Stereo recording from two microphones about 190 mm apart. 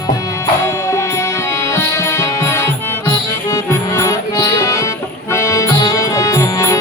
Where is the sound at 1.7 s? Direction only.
15° left (ahead or behind).